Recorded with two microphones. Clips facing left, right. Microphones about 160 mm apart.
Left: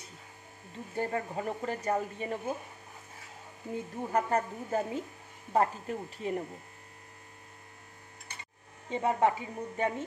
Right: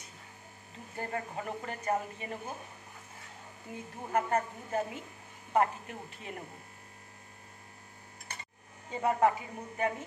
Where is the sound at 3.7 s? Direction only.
35° left (ahead or behind).